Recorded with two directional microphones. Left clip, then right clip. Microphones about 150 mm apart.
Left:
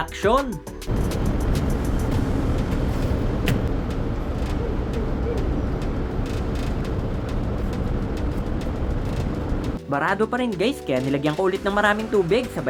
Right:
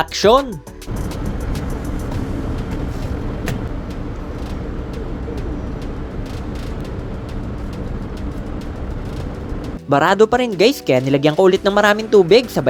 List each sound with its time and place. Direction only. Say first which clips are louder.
0.2 s speech: right 8 dB; 35° right (ahead or behind)
9.9 s speech: right 10 dB; 35° right (ahead or behind)